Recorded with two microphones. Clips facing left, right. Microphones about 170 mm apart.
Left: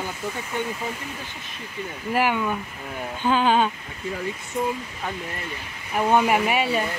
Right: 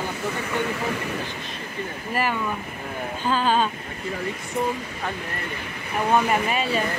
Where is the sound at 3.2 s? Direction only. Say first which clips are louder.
Left 2 dB; 15° left (ahead or behind).